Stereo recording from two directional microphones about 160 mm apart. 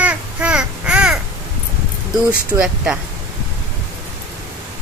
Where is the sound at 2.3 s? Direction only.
5° right (ahead or behind).